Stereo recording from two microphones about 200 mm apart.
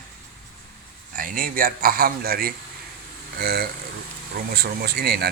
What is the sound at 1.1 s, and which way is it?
Speech, 45° right (ahead or behind).